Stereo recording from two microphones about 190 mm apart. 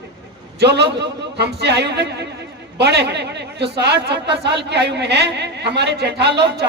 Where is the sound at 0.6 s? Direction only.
60° right (ahead or behind).